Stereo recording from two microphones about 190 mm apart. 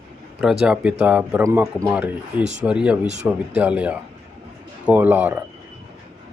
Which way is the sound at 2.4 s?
35° right (ahead or behind).